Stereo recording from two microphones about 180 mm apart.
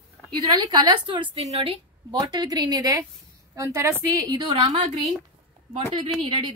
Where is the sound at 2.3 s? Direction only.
20° right (ahead or behind).